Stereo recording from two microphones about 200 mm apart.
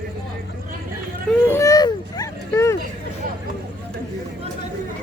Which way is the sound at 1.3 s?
10° left (ahead or behind).